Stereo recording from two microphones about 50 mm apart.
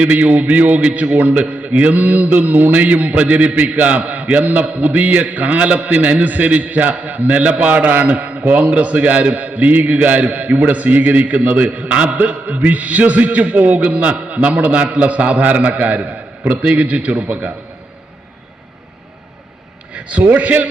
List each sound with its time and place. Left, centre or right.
0.0 s a man's voice: right
19.9 s a man's voice: right